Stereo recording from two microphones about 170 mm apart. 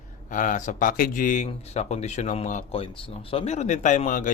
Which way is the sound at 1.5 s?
40° left (ahead or behind).